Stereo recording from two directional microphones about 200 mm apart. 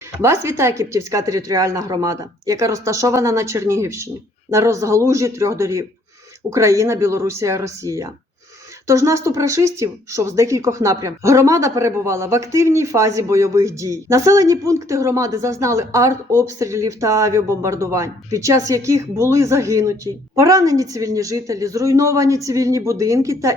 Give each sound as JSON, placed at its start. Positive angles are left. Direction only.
{"t": 0.2, "sound": "speech", "side_deg": -15}